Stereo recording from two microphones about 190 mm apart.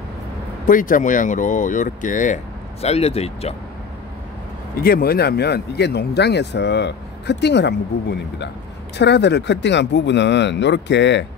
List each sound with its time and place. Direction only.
0.7 s speech: 45° left (ahead or behind)
4.7 s speech: 50° left (ahead or behind); by 11.2 s 65° left (ahead or behind)